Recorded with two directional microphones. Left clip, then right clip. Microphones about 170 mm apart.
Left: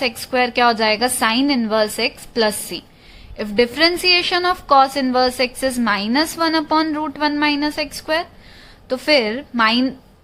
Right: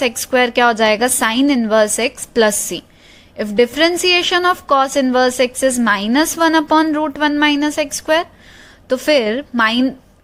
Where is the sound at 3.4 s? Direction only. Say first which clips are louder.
Right 2 dB; 25° right (ahead or behind).